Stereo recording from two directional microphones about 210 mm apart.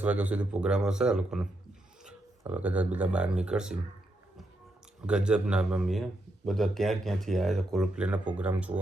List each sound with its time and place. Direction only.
0.0 s speech: 5° right (ahead or behind)
5.0 s speech: 5° right (ahead or behind)